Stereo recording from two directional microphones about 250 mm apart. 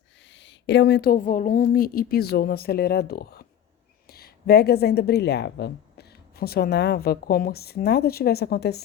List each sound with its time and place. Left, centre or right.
0.3 s speech: left